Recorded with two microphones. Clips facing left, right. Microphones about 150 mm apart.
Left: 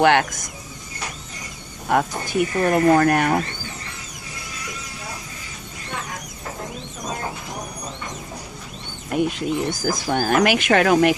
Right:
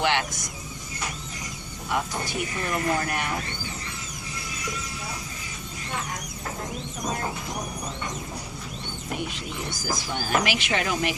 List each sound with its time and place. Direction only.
0.0 s speech: 50° left (ahead or behind)
1.9 s speech: 55° left (ahead or behind)
9.1 s speech: 50° left (ahead or behind)